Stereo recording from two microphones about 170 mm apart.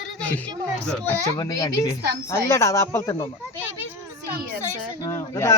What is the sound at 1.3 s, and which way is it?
A woman's voice, 25° left (ahead or behind).